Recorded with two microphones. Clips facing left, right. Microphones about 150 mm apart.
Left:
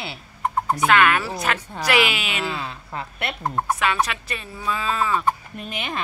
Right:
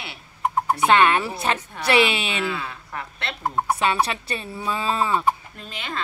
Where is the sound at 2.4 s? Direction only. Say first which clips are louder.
Right 1 dB; 30° left (ahead or behind).